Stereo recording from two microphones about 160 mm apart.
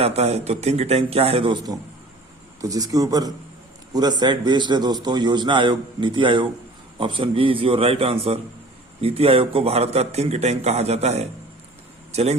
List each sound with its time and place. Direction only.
0.0 s a man's voice: 40° right (ahead or behind)